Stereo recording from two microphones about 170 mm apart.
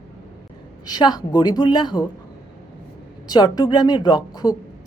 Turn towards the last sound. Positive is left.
turn(degrees=25)  # may be behind; listen again after turning